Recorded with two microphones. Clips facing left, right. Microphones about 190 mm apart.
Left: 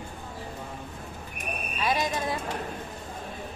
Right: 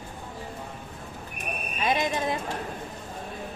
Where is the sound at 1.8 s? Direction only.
20° right (ahead or behind).